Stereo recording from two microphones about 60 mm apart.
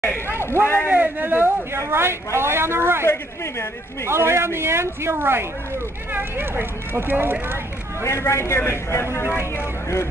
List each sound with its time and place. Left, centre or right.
0.4 s speech: left
0.8 s speech: right
1.9 s speech: right
3.1 s a man's voice: left
4.1 s speech: right
8.0 s a man's voice: left